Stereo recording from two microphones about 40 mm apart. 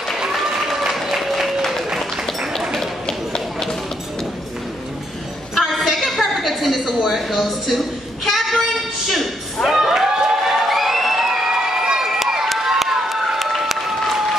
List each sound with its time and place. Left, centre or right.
0.6 s applause: centre
3.1 s run: centre
5.6 s a sound: centre
12.4 s run: centre